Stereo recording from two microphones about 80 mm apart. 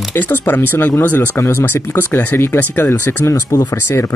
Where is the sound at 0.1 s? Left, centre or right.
Left.